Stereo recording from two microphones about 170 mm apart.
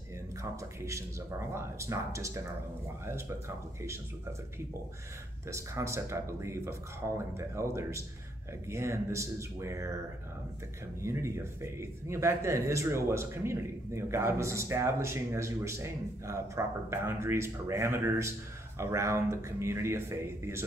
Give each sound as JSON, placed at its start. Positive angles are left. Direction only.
{"t": 0.4, "sound": "a man's voice", "side_deg": -15}
{"t": 5.5, "sound": "a man's voice", "side_deg": -15}
{"t": 11.0, "sound": "a man's voice", "side_deg": -15}